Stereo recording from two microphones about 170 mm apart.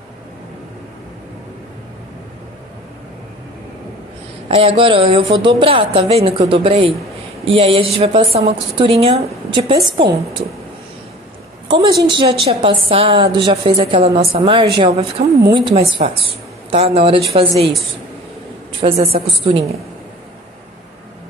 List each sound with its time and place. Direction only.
4.5 s a woman's voice: 35° right (ahead or behind)
10.0 s a woman's voice: 75° right (ahead or behind)
11.6 s a woman's voice: 30° right (ahead or behind)
18.8 s a woman's voice: 35° right (ahead or behind)